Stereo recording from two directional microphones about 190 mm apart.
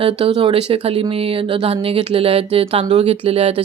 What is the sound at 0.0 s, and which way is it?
Speech, 25° right (ahead or behind).